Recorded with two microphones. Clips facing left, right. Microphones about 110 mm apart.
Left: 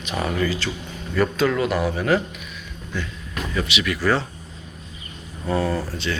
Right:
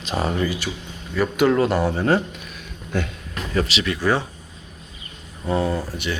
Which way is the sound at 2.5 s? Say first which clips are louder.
Right 9 dB; 55° right (ahead or behind).